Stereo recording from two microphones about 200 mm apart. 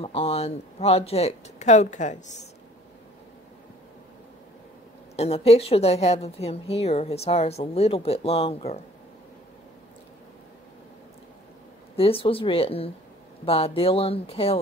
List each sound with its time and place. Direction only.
0.0 s a woman's voice: 30° left (ahead or behind)
5.1 s a woman's voice: 30° left (ahead or behind)
12.0 s speech: 30° left (ahead or behind)